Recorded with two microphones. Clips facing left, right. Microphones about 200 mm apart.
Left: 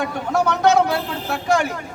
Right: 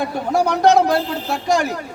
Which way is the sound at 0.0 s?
35° right (ahead or behind).